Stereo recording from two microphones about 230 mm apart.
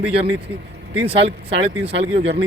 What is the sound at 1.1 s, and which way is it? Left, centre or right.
Speech, right.